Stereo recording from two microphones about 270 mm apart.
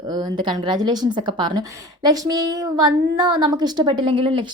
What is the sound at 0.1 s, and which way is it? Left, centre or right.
A woman's voice, centre.